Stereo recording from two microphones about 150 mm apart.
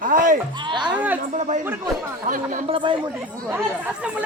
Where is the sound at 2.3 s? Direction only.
65° right (ahead or behind).